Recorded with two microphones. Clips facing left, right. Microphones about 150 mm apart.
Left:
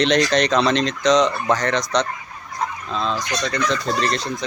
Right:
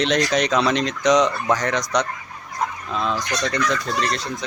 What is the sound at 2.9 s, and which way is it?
Speech, 15° right (ahead or behind).